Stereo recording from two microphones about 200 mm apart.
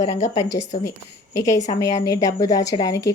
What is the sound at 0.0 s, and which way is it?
Speech, 35° left (ahead or behind).